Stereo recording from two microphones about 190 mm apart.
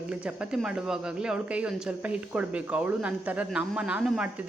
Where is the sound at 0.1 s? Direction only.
5° right (ahead or behind).